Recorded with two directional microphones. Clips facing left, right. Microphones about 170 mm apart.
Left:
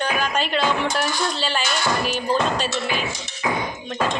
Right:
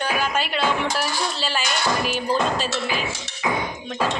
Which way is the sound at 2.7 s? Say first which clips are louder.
Left 1 dB; 40° right (ahead or behind).